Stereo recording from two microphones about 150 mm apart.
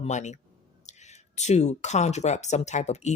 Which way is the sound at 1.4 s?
50° left (ahead or behind).